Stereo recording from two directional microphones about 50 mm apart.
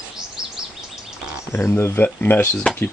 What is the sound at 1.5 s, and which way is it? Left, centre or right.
Speech, left.